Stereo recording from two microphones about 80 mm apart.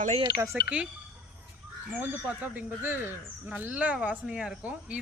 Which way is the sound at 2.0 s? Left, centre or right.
Right.